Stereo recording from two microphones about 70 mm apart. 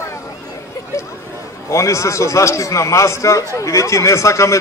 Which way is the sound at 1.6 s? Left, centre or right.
Left.